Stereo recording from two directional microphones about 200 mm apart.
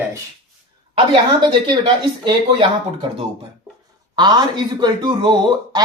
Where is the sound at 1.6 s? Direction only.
25° right (ahead or behind).